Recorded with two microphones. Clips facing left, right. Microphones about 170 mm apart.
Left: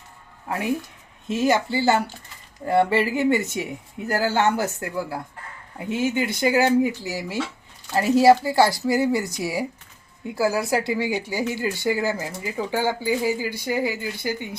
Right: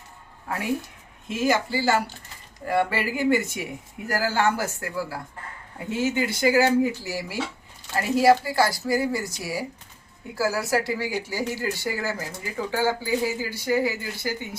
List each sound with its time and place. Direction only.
0.4 s speech: 20° left (ahead or behind)